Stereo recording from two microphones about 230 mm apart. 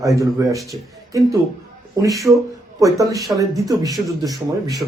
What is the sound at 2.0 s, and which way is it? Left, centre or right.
Speech, centre.